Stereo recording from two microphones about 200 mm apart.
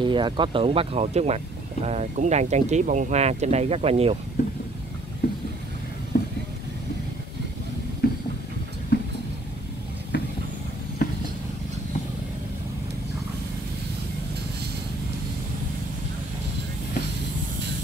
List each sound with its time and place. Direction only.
0.0 s speech: 25° right (ahead or behind)
6.1 s vehicle: 45° left (ahead or behind)
8.0 s a sound: 50° left (ahead or behind)
10.1 s vehicle: 60° left (ahead or behind)